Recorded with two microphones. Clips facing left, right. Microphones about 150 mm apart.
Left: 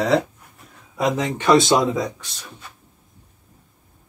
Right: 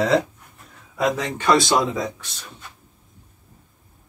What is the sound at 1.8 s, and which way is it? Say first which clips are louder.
Speech: left 3 dB; centre (ahead or behind).